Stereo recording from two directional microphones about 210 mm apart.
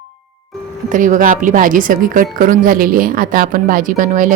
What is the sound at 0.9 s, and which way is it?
Speech, 40° right (ahead or behind).